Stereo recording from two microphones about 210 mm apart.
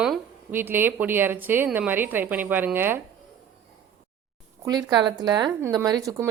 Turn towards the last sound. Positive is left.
turn(degrees=-15)  # may be behind; listen again after turning